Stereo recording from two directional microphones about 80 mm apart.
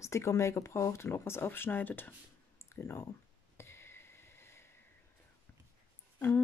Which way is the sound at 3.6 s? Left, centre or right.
Left.